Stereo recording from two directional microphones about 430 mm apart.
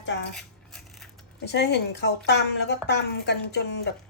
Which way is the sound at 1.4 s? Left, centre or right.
Left.